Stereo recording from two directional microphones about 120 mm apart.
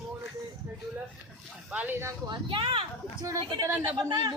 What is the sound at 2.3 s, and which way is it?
A woman's voice, 45° right (ahead or behind).